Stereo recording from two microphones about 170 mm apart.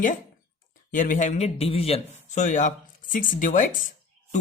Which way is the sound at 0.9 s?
50° left (ahead or behind).